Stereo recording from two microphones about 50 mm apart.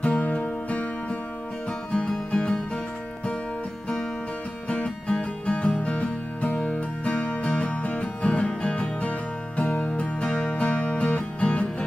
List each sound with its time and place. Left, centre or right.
0.0 s music: left
1.9 s music: left
4.6 s music: left